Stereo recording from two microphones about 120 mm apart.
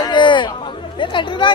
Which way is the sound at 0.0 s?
40° left (ahead or behind).